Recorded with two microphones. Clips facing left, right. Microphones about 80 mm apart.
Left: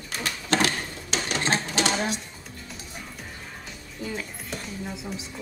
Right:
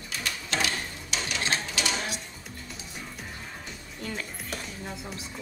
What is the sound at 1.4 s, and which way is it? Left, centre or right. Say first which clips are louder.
Sewing machine: left 5 dB; left.